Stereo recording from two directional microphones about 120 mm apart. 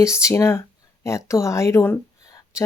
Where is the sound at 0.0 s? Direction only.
25° left (ahead or behind).